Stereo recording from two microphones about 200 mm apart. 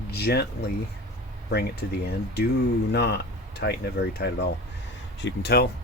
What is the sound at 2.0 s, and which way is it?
Speech, 55° left (ahead or behind).